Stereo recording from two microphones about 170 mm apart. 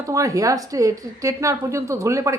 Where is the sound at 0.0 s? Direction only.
20° right (ahead or behind).